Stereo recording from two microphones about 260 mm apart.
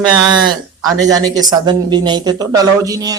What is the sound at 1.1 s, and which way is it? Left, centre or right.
A man's voice, centre.